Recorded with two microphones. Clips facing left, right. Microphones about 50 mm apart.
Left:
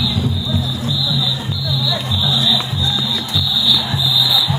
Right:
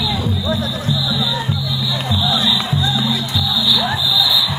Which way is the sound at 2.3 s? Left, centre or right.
Right.